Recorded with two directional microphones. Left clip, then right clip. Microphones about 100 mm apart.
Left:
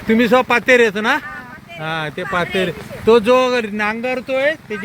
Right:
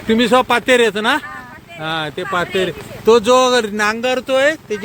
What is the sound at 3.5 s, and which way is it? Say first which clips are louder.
Speech: right 3 dB; 50° right (ahead or behind).